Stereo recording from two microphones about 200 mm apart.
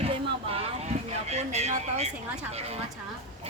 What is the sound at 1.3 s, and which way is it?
Speech, 35° right (ahead or behind).